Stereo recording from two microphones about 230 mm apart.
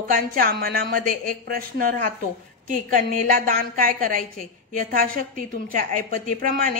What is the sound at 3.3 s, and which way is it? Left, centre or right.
A woman's voice, right.